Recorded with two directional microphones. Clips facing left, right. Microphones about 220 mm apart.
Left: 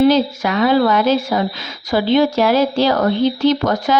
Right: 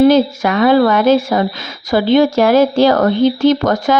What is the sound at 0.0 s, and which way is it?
Speech, 50° right (ahead or behind).